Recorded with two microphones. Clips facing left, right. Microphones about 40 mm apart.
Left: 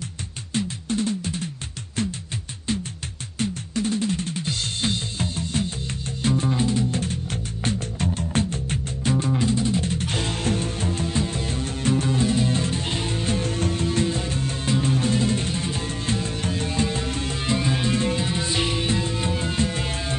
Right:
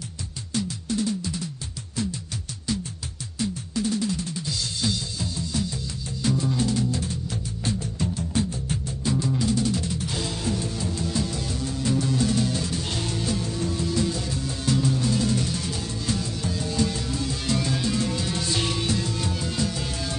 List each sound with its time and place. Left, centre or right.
0.6 s music: left
3.3 s music: left
6.9 s music: left
17.5 s music: left